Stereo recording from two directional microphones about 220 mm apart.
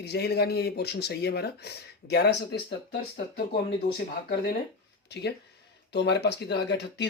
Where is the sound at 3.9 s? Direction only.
45° left (ahead or behind).